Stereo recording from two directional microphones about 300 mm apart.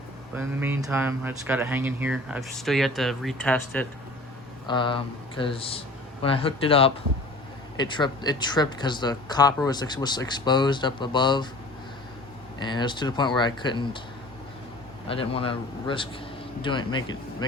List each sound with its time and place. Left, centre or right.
0.3 s speech: centre
4.6 s speech: centre
12.5 s speech: centre
15.0 s speech: centre